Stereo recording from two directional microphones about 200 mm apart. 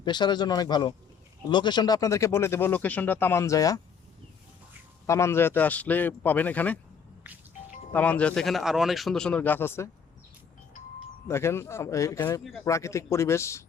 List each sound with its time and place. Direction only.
0.0 s speech: 20° left (ahead or behind)
5.0 s speech: 15° left (ahead or behind)
7.9 s a man's voice: 5° left (ahead or behind)
11.3 s speech: 15° left (ahead or behind)
12.4 s a man's voice: centre (ahead or behind)
12.6 s speech: 15° left (ahead or behind)